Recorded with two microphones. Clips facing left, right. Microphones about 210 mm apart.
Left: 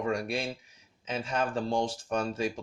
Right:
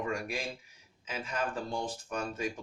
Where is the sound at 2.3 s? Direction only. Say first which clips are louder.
Left 4 dB; 30° left (ahead or behind).